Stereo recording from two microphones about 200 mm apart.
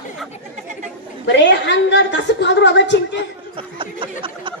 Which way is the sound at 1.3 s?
60° left (ahead or behind).